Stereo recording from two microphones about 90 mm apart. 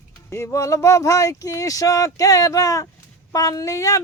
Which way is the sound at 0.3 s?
35° left (ahead or behind).